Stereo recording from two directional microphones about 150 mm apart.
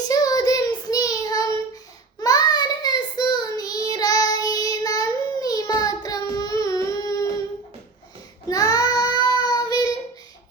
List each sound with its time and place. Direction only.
0.1 s child singing: 25° left (ahead or behind)
6.8 s a sound: 25° left (ahead or behind)
8.4 s child singing: 25° left (ahead or behind)